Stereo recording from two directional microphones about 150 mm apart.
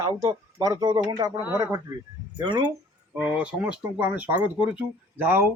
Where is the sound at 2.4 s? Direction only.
30° right (ahead or behind).